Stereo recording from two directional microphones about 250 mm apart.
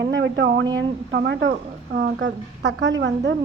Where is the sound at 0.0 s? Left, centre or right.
Right.